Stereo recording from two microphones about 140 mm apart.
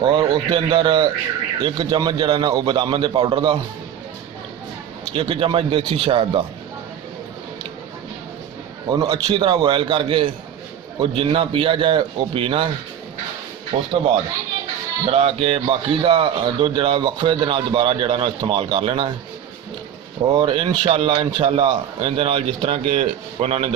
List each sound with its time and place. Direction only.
0.0 s a man's voice: 30° right (ahead or behind)
5.1 s a man's voice: 40° right (ahead or behind)
8.9 s a man's voice: 30° right (ahead or behind)
13.7 s speech: 45° right (ahead or behind)
15.1 s a man's voice: 45° right (ahead or behind)
20.3 s a man's voice: 35° right (ahead or behind)